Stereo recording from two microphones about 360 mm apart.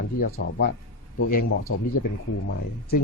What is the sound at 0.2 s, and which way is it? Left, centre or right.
Speech, left.